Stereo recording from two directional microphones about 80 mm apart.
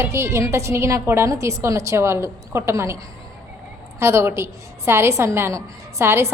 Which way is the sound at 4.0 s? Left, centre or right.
Right.